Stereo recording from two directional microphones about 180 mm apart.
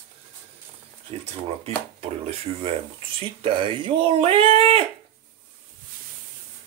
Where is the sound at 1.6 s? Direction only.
35° right (ahead or behind).